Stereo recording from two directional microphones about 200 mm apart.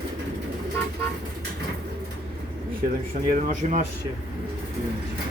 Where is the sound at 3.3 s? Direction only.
40° right (ahead or behind).